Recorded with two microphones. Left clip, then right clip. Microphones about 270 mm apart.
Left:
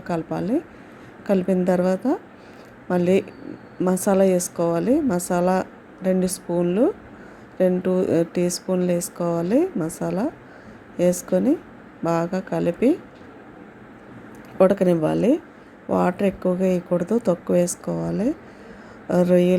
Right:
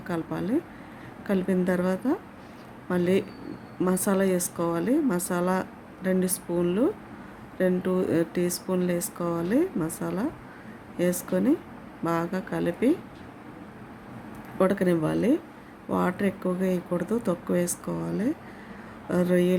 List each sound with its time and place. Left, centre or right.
0.1 s a woman's voice: centre
14.6 s a woman's voice: centre